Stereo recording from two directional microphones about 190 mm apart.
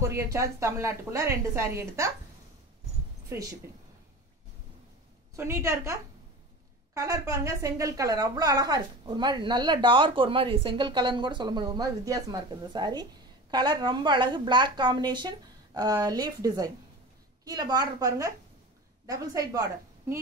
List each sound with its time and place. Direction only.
0.1 s a woman's voice: 15° right (ahead or behind)
3.3 s speech: 15° right (ahead or behind)
5.3 s a woman's voice: 15° right (ahead or behind)